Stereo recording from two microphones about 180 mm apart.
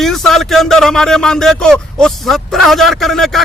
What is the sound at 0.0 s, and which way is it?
Speech, centre (ahead or behind).